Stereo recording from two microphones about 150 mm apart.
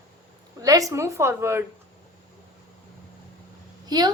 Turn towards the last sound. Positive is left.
turn(degrees=-25)  # may be behind; listen again after turning